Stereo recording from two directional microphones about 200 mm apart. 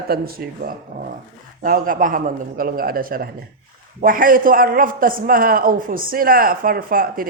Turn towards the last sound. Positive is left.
turn(degrees=-45)  # may be behind; listen again after turning